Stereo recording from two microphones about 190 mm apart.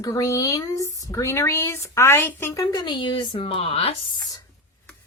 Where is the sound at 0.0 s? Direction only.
20° left (ahead or behind).